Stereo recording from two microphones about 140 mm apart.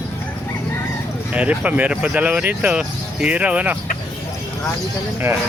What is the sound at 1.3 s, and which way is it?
Speech, 10° right (ahead or behind).